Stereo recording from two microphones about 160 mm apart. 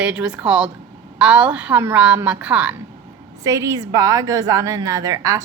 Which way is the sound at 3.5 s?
20° right (ahead or behind).